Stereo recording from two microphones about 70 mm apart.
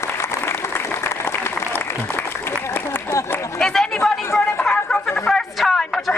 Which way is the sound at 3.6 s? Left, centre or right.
Centre.